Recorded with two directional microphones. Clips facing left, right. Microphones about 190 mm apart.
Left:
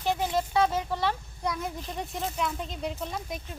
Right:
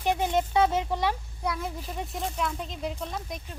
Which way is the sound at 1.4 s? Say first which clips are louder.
Even; 5° right (ahead or behind).